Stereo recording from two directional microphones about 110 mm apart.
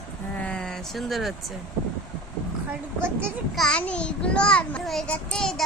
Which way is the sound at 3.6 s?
10° left (ahead or behind).